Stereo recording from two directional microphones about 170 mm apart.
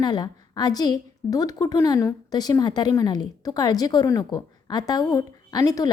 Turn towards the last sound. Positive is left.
turn(degrees=20)  # may be behind; listen again after turning